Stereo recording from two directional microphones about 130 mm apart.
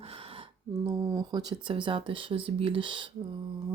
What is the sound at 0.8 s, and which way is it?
Speech, 30° right (ahead or behind).